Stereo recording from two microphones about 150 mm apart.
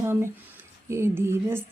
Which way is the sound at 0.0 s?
15° right (ahead or behind).